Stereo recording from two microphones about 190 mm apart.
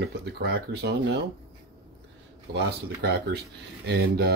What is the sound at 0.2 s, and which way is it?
Speech, 60° right (ahead or behind).